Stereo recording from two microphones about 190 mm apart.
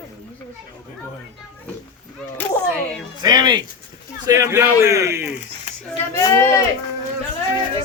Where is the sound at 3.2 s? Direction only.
20° right (ahead or behind).